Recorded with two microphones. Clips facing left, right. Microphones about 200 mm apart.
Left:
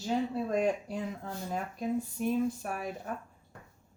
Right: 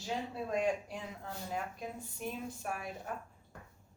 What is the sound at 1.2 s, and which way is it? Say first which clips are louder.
Speech: left 4 dB; 40° left (ahead or behind).